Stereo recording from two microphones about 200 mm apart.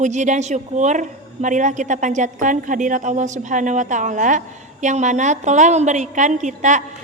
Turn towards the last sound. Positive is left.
turn(degrees=-35)  # may be behind; listen again after turning